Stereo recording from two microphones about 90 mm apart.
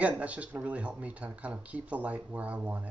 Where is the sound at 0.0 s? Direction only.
15° right (ahead or behind).